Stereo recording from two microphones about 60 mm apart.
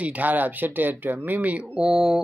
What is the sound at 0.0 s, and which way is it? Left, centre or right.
Speech, right.